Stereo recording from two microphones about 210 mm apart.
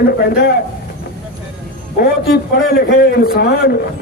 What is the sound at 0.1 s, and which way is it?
Speech, 50° left (ahead or behind).